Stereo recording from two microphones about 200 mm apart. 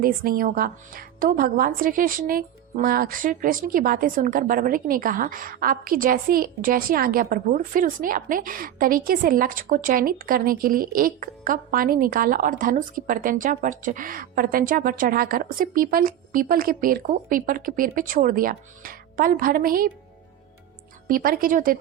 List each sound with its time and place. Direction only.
0.0 s a woman's voice: 45° right (ahead or behind)
21.1 s a woman's voice: 45° right (ahead or behind)